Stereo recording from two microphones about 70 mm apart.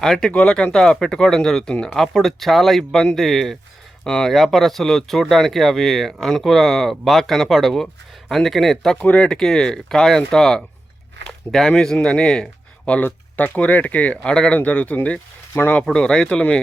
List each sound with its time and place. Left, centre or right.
0.0 s speech: centre
9.0 s speech: centre
14.2 s speech: centre
15.9 s speech: centre